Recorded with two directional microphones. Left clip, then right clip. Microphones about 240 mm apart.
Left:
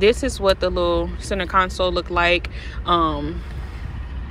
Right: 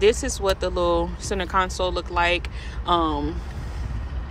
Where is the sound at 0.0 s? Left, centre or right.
Centre.